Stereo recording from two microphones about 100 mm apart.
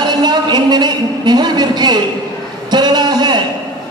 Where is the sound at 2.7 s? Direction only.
45° right (ahead or behind).